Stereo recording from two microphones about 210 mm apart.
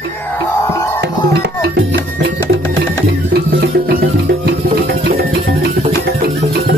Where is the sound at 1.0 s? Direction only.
55° right (ahead or behind).